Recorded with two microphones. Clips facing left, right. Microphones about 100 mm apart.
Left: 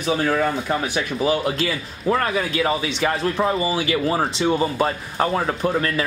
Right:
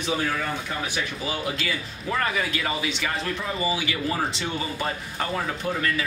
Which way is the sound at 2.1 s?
40° left (ahead or behind).